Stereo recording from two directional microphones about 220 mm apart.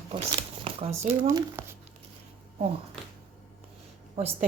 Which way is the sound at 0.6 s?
25° right (ahead or behind).